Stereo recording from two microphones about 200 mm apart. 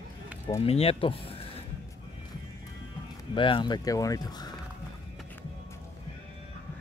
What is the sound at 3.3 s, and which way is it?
Speech, 25° left (ahead or behind).